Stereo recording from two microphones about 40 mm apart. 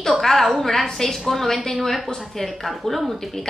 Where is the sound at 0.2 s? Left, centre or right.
Centre.